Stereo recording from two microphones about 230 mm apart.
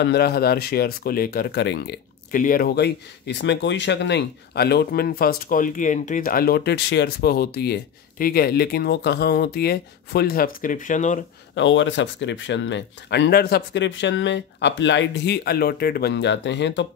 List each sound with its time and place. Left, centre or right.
0.0 s speech: left
11.5 s speech: left